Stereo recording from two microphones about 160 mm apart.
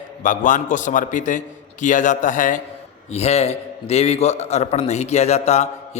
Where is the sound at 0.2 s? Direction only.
50° left (ahead or behind).